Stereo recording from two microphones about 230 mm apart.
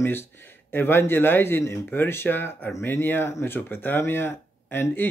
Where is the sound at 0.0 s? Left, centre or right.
Centre.